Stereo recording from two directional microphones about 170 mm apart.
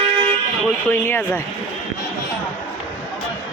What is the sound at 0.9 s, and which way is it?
Speech, 15° left (ahead or behind).